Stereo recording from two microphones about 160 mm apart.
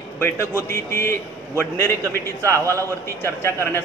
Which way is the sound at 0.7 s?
15° left (ahead or behind).